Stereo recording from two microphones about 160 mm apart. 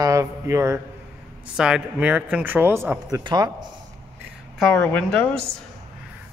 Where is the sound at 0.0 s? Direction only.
20° right (ahead or behind).